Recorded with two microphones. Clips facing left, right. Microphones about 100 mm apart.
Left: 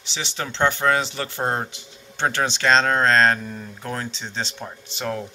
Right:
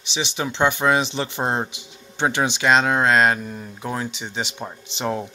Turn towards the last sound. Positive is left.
turn(degrees=-20)  # may be behind; listen again after turning